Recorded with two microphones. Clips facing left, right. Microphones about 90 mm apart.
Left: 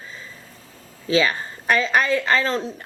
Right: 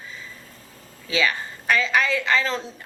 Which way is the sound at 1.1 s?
35° left (ahead or behind).